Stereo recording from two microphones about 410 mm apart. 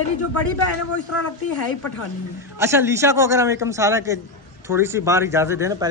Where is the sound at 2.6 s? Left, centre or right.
Centre.